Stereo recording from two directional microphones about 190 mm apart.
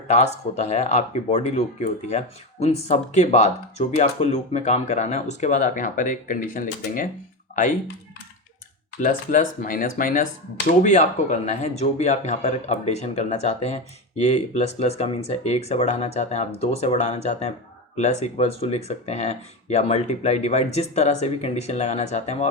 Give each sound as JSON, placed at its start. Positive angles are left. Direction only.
{"t": 0.1, "sound": "speech", "side_deg": 35}
{"t": 9.0, "sound": "speech", "side_deg": 40}